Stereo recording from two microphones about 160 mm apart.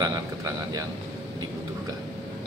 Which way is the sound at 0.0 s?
20° right (ahead or behind).